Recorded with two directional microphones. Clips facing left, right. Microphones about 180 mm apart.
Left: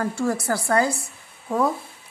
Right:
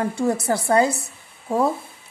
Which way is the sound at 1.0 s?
25° right (ahead or behind).